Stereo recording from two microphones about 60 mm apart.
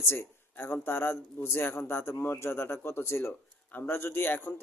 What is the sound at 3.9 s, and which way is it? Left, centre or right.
Speech, left.